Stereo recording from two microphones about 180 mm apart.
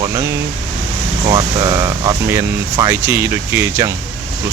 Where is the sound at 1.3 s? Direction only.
20° right (ahead or behind).